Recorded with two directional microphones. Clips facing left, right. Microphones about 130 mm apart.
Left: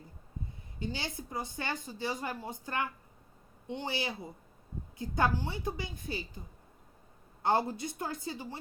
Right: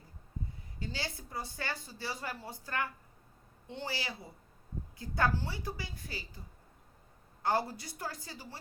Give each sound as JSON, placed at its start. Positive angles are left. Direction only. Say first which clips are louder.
{"t": 0.8, "sound": "a woman's voice", "louder": "left 3 dB", "side_deg": 20}
{"t": 7.4, "sound": "a woman's voice", "louder": "left 3 dB", "side_deg": 20}